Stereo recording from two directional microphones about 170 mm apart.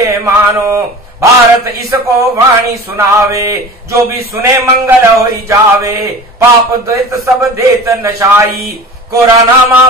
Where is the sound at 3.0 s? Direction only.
15° right (ahead or behind).